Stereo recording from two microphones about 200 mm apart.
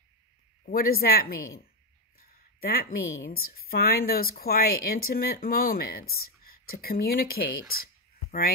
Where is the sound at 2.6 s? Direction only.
50° left (ahead or behind).